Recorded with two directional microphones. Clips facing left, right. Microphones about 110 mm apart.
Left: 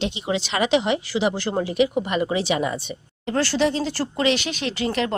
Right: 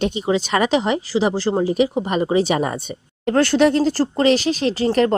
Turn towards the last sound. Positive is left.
turn(degrees=-40)  # may be behind; listen again after turning